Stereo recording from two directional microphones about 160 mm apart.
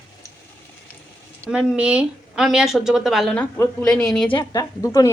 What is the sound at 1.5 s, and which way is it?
Speech, 5° right (ahead or behind).